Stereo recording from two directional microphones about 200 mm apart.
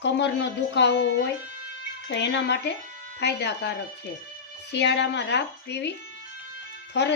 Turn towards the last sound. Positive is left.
turn(degrees=60)  # may be behind; listen again after turning